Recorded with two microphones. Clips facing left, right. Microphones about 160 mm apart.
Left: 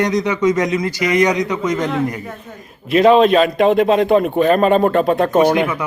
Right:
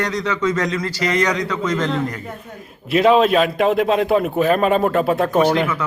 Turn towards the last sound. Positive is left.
turn(degrees=15)  # may be behind; listen again after turning